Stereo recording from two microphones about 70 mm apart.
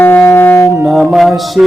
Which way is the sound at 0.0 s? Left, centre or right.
Left.